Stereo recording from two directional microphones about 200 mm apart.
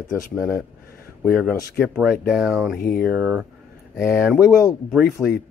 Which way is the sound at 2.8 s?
50° left (ahead or behind).